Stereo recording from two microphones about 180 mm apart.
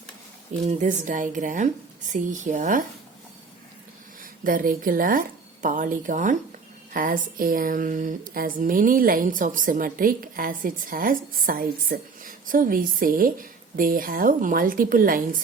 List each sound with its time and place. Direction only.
0.6 s speech: 40° right (ahead or behind)
4.2 s a woman's voice: 50° right (ahead or behind)